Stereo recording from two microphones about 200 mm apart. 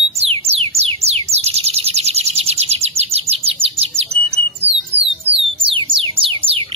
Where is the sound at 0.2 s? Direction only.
30° right (ahead or behind).